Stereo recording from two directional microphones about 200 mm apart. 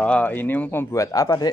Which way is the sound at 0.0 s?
5° left (ahead or behind).